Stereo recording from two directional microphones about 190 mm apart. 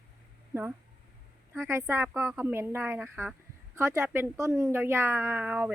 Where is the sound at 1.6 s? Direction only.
15° right (ahead or behind).